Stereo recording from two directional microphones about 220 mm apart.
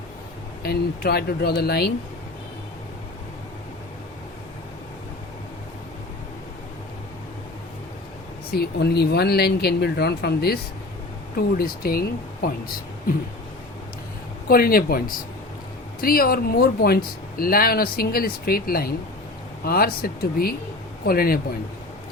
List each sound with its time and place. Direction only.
0.6 s speech: 45° left (ahead or behind)
8.4 s speech: 45° left (ahead or behind)
14.4 s speech: 40° left (ahead or behind)